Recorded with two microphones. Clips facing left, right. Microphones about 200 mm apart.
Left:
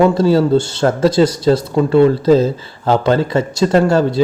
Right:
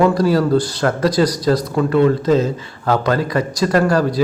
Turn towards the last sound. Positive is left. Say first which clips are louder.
# left 3 dB
turn(degrees=25)  # may be behind; listen again after turning